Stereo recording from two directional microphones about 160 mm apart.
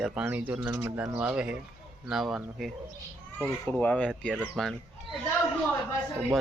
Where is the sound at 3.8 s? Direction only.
10° left (ahead or behind).